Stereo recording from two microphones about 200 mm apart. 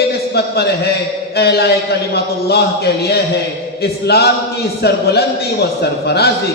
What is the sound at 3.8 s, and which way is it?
A man's voice, 55° left (ahead or behind).